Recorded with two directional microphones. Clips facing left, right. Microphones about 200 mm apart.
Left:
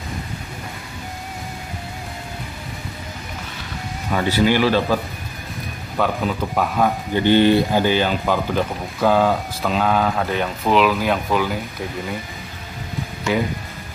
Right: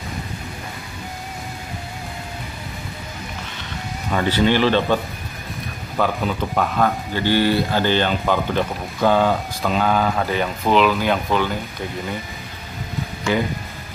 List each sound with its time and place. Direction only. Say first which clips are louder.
4.1 s speech: even; 10° left (ahead or behind)
7.2 s speech: left 4 dB; 20° left (ahead or behind)
7.8 s speech: left 1 dB; 5° left (ahead or behind)
13.3 s speech: even; centre (ahead or behind)